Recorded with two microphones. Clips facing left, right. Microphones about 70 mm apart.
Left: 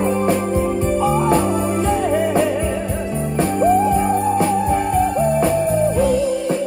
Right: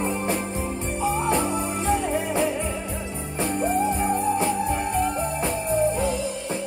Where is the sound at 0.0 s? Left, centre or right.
Left.